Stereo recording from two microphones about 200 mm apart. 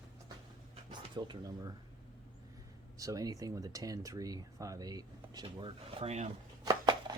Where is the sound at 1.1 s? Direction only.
20° right (ahead or behind).